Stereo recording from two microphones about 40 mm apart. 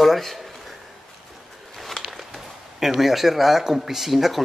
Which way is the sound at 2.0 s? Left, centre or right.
Centre.